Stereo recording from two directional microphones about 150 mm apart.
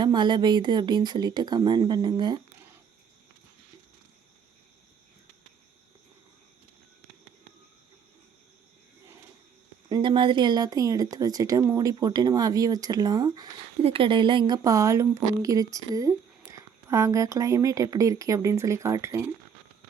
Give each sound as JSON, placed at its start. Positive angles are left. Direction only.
{"t": 0.0, "sound": "speech", "side_deg": -30}
{"t": 9.9, "sound": "speech", "side_deg": -30}
{"t": 13.8, "sound": "speech", "side_deg": -35}